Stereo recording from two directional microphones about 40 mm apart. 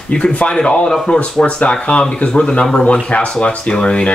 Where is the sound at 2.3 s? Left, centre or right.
Centre.